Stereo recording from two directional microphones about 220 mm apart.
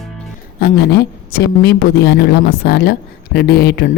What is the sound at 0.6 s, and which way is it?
A woman's voice, 45° left (ahead or behind).